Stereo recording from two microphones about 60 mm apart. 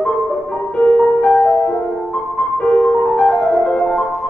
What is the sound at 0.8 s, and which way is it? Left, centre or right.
Music, centre.